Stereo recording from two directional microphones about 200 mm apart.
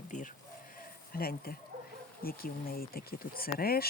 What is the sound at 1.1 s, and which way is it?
Speech, 50° left (ahead or behind).